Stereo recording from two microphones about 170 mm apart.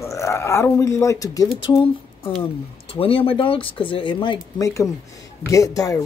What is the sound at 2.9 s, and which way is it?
Speech, 30° left (ahead or behind).